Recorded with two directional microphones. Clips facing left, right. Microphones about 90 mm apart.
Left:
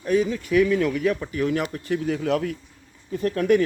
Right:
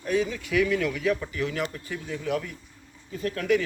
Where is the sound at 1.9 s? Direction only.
85° left.